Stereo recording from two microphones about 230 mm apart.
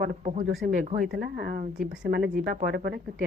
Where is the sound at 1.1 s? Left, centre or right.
Right.